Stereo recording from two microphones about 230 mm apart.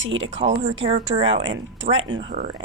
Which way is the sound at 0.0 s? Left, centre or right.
Right.